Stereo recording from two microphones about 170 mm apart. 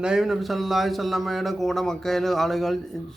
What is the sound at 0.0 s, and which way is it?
A man's voice, 5° right (ahead or behind).